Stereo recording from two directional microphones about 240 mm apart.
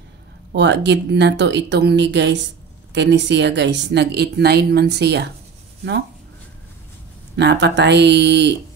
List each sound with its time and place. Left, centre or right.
0.5 s speech: right
7.3 s speech: right